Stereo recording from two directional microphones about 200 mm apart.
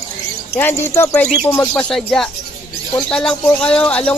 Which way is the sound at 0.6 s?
10° left (ahead or behind).